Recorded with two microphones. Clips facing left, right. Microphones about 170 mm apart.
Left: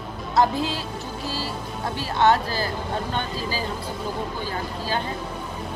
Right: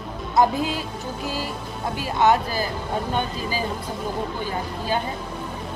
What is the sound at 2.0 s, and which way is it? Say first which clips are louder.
Speech: right 1 dB; 15° right (ahead or behind).